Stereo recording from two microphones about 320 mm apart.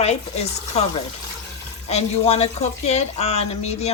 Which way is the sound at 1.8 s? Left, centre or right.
Centre.